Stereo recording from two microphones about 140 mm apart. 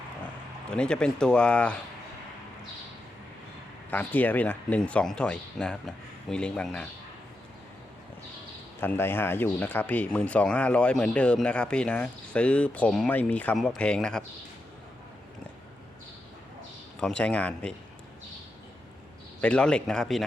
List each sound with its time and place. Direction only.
0.7 s speech: 5° left (ahead or behind)
3.9 s speech: 10° left (ahead or behind)
8.8 s speech: 15° left (ahead or behind)
17.0 s speech: 5° left (ahead or behind)
19.4 s speech: 10° left (ahead or behind)